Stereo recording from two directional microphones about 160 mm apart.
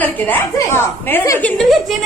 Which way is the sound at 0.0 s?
10° left (ahead or behind).